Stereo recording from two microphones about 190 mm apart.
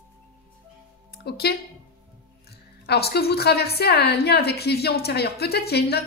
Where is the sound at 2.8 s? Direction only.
55° left (ahead or behind).